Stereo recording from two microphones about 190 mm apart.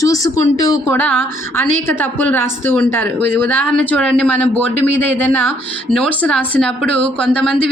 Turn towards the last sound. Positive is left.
turn(degrees=5)  # may be behind; listen again after turning